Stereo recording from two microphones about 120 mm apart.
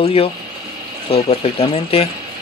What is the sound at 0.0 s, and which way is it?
Speech, 55° left (ahead or behind).